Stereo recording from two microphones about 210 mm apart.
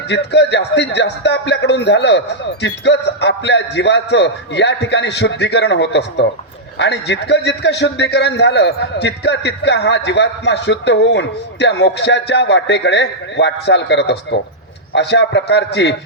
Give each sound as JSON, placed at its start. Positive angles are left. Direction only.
{"t": 0.1, "sound": "a man's voice", "side_deg": 55}